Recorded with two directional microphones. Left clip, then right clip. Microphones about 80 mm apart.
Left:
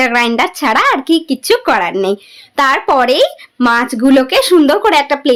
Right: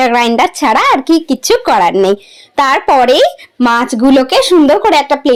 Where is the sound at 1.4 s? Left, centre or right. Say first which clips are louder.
Right 3 dB; right.